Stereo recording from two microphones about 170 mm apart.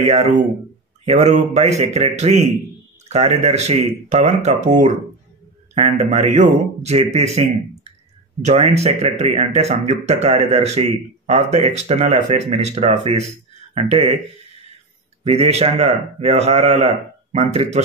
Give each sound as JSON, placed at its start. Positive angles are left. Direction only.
{"t": 0.0, "sound": "speech", "side_deg": -40}
{"t": 15.2, "sound": "speech", "side_deg": -35}